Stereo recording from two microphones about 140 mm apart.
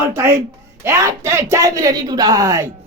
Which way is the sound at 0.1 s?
20° right (ahead or behind).